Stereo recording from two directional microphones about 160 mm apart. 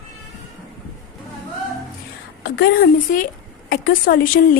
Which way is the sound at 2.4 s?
70° left (ahead or behind).